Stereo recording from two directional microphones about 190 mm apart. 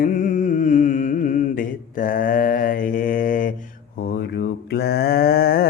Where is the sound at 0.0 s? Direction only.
40° left (ahead or behind).